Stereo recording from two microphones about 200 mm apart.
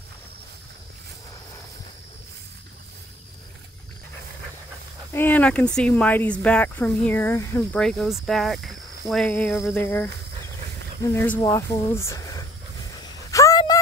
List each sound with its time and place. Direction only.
5.1 s speech: 10° left (ahead or behind)
9.2 s speech: 10° left (ahead or behind)
13.3 s a sound: 15° left (ahead or behind)